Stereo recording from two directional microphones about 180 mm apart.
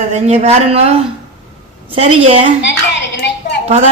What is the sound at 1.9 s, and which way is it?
Speech, 35° right (ahead or behind).